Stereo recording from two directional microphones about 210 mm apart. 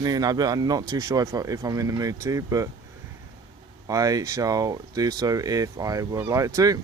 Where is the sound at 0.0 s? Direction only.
20° right (ahead or behind).